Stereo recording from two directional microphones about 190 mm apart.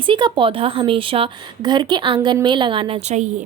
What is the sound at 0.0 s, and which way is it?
A woman's voice, 25° right (ahead or behind).